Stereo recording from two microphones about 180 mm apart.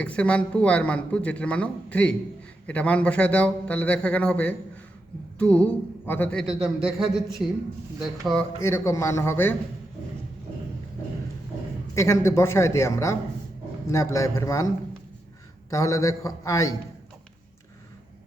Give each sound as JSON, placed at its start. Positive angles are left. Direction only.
{"t": 0.0, "sound": "a man's voice", "side_deg": 5}
{"t": 8.5, "sound": "speech", "side_deg": 15}
{"t": 11.9, "sound": "speech", "side_deg": 15}
{"t": 15.7, "sound": "speech", "side_deg": 15}